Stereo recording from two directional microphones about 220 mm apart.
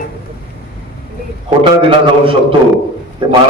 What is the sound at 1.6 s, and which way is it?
A man's voice, 25° right (ahead or behind).